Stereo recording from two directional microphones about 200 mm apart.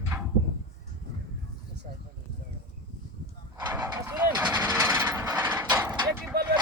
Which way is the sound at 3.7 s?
10° right (ahead or behind).